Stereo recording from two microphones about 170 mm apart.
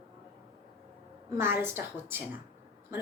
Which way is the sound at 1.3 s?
15° right (ahead or behind).